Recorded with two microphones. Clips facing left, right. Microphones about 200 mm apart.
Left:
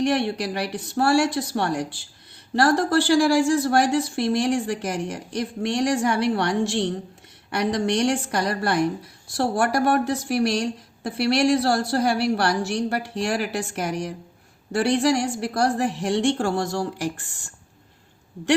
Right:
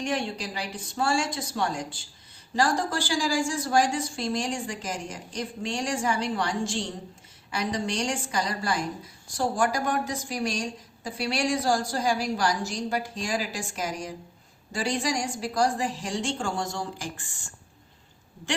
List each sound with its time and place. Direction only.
0.0 s a woman's voice: 65° left (ahead or behind)